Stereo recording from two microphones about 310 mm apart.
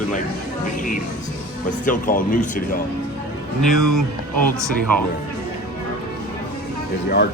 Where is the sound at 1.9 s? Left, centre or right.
Left.